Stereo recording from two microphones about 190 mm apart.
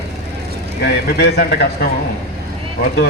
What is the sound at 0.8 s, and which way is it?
A man's voice, 60° left (ahead or behind).